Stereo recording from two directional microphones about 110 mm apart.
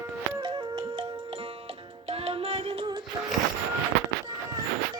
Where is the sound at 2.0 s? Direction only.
65° right (ahead or behind).